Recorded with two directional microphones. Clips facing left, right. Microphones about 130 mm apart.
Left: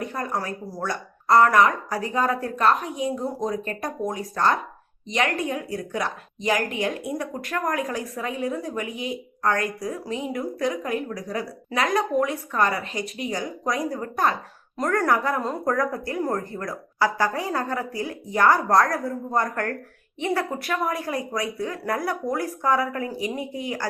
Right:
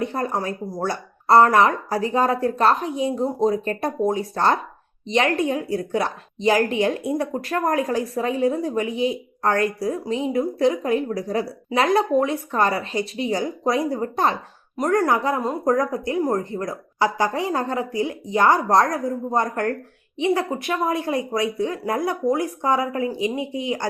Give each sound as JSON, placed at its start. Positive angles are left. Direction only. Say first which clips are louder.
{"t": 0.0, "sound": "a woman's voice", "louder": "right 4 dB", "side_deg": -30}